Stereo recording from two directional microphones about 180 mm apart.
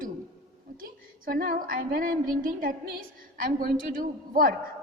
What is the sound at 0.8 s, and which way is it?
A woman's voice, 55° right (ahead or behind).